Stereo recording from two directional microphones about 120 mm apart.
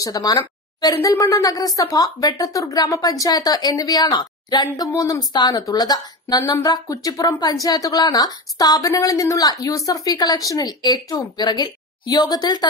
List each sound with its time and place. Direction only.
0.0 s a woman's voice: 30° left (ahead or behind)